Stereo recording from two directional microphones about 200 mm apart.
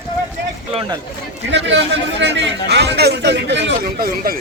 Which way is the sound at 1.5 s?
60° right (ahead or behind).